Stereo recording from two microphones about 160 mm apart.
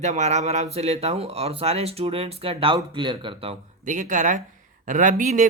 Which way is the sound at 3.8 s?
55° right (ahead or behind).